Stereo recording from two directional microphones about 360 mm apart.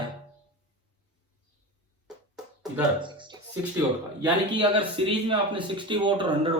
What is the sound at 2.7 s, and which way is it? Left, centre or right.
A man's voice, centre.